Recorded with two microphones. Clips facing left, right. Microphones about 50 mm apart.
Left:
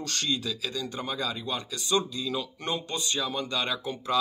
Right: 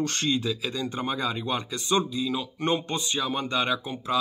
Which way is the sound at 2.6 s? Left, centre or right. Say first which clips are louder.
Right 5 dB; right.